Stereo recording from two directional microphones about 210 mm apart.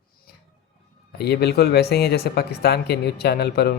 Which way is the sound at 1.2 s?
50° left (ahead or behind).